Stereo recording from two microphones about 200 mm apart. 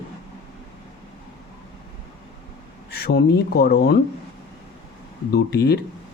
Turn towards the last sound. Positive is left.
turn(degrees=55)  # may be behind; listen again after turning